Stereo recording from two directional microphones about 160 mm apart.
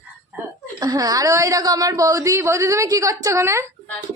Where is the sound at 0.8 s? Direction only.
20° right (ahead or behind).